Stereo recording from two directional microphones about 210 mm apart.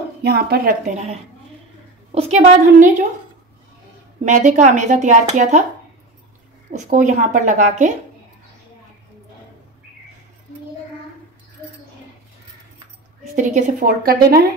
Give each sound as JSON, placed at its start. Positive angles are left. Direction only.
{"t": 0.2, "sound": "speech", "side_deg": -50}
{"t": 2.1, "sound": "speech", "side_deg": -30}
{"t": 4.2, "sound": "speech", "side_deg": -35}
{"t": 6.7, "sound": "speech", "side_deg": -35}
{"t": 13.4, "sound": "speech", "side_deg": -35}